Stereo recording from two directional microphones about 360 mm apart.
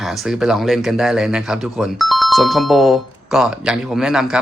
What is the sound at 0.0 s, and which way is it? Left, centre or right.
Speech, centre.